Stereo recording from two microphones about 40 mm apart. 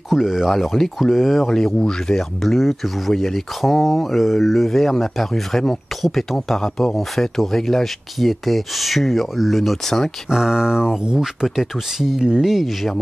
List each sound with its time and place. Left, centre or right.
0.1 s speech: centre
2.4 s speech: centre
10.3 s speech: centre
11.1 s speech: centre